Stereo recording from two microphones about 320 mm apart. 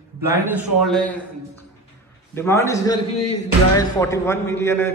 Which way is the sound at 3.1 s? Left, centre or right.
Left.